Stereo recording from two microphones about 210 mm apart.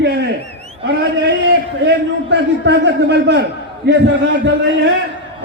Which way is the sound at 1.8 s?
55° right (ahead or behind).